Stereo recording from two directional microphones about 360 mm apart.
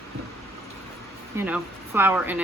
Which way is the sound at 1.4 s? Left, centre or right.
Centre.